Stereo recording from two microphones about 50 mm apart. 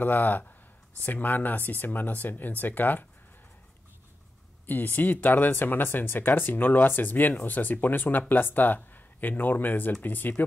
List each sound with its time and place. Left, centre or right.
0.0 s speech: left
4.6 s speech: left